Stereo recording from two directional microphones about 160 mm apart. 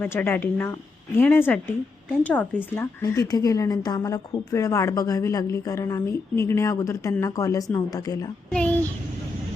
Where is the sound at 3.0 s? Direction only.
20° left (ahead or behind).